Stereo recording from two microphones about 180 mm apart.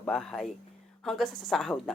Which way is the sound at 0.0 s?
5° left (ahead or behind).